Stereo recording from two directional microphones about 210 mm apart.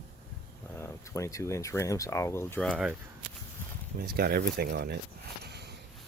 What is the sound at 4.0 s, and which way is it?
Speech, 45° right (ahead or behind).